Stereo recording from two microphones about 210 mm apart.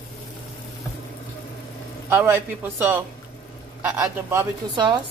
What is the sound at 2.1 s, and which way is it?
Speech, 10° right (ahead or behind).